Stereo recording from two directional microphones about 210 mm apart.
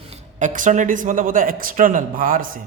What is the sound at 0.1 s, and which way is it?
Speech, 35° right (ahead or behind).